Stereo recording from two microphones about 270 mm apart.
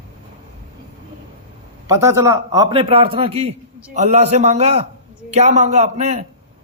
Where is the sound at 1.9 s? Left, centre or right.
Centre.